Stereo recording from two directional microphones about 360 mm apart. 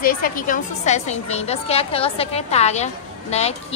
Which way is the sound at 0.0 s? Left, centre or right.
Left.